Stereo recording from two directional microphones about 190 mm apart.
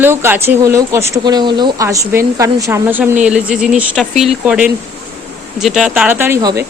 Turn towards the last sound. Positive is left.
turn(degrees=-15)  # may be behind; listen again after turning